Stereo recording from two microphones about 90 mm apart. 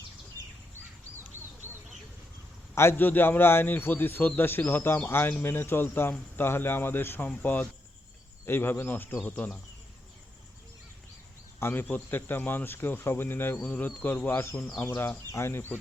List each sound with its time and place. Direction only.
2.7 s a man's voice: 25° left (ahead or behind)
11.6 s a man's voice: 20° left (ahead or behind)